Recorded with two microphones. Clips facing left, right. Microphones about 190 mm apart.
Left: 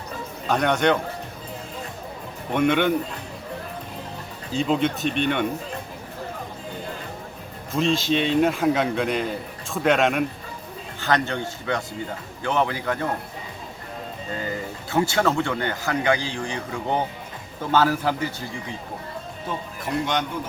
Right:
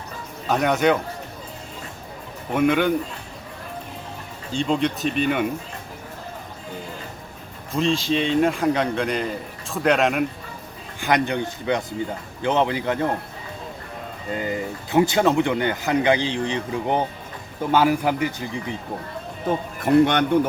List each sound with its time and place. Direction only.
0.4 s a man's voice: 5° right (ahead or behind)
2.5 s a man's voice: centre (ahead or behind)
4.5 s a man's voice: centre (ahead or behind)
7.7 s a man's voice: centre (ahead or behind)
11.0 s a man's voice: 15° right (ahead or behind)
14.3 s speech: 15° right (ahead or behind)
19.5 s a man's voice: 55° right (ahead or behind)